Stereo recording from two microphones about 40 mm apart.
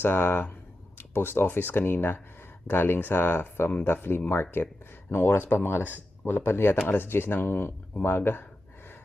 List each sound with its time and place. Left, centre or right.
0.0 s speech: left
5.5 s speech: left
5.8 s speech: left